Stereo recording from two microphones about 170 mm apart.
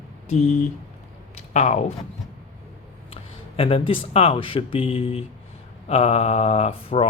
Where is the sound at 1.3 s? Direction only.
40° left (ahead or behind).